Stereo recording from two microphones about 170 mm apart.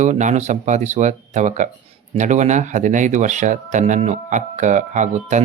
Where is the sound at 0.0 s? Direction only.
45° right (ahead or behind).